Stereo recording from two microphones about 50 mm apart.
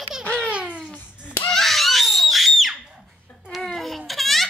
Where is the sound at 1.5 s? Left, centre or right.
Centre.